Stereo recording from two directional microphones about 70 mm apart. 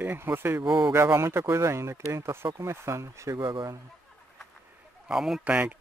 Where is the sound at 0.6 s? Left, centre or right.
Right.